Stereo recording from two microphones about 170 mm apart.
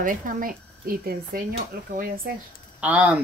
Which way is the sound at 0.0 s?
55° right (ahead or behind).